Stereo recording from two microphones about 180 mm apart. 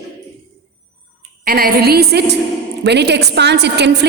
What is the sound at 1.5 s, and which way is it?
A woman's voice, 55° right (ahead or behind).